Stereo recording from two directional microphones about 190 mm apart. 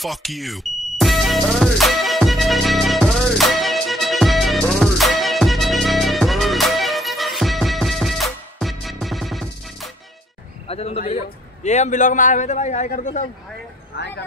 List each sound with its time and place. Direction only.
0.0 s music: centre (ahead or behind)
10.7 s a man's voice: 30° left (ahead or behind)
13.9 s speech: 65° left (ahead or behind)